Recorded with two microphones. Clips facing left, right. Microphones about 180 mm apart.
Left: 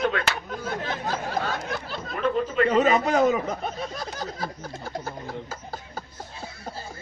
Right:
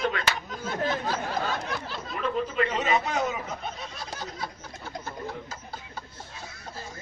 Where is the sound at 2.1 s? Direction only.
50° left (ahead or behind).